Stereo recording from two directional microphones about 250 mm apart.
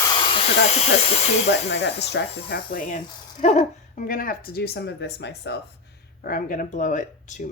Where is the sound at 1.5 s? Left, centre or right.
Left.